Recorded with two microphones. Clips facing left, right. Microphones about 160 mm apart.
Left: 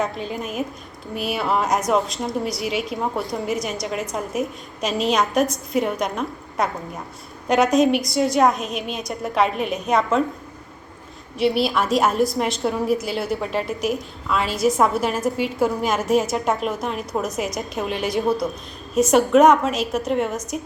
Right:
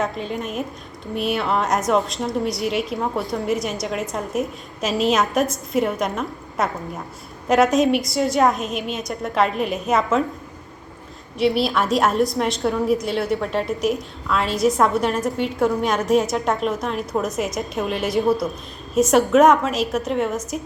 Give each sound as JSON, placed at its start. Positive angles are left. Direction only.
{"t": 0.0, "sound": "a woman's voice", "side_deg": 0}
{"t": 11.3, "sound": "a woman's voice", "side_deg": 0}